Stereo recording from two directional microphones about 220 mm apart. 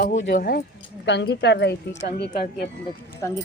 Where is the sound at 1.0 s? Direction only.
50° left (ahead or behind).